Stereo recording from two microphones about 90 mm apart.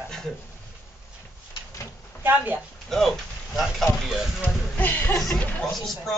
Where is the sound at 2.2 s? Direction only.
20° right (ahead or behind).